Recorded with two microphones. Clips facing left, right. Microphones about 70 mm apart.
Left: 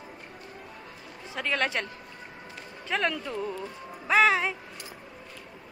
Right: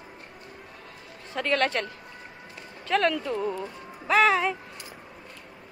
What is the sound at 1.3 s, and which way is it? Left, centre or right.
A woman's voice, centre.